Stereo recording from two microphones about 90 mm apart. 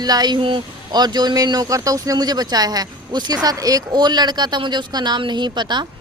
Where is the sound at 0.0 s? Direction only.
50° right (ahead or behind).